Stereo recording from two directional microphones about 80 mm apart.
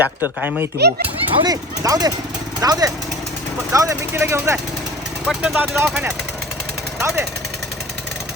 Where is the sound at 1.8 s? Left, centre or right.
Right.